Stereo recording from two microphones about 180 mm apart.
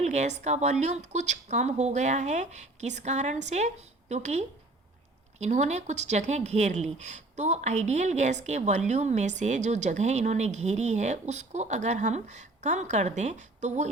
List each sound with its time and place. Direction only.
0.0 s a woman's voice: 40° right (ahead or behind)